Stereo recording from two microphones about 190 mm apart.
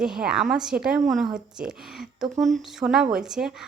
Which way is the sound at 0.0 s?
5° right (ahead or behind).